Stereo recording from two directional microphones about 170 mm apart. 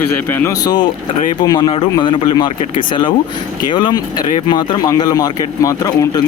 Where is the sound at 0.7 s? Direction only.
30° left (ahead or behind).